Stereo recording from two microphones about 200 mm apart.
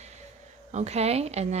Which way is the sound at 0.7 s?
35° right (ahead or behind).